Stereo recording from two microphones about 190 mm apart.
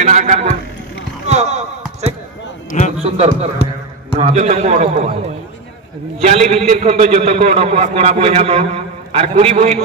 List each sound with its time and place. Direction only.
0.0 s a sound: 40° right (ahead or behind)
1.2 s basketball bounce: 35° right (ahead or behind)
3.0 s a man's voice: 30° right (ahead or behind)
6.2 s a man's voice: 35° right (ahead or behind)